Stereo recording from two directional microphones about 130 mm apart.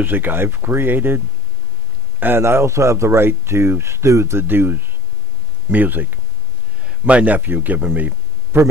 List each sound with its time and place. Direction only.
0.0 s speech: 15° right (ahead or behind)